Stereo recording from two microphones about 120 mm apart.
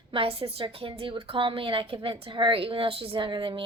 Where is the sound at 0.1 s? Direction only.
50° right (ahead or behind).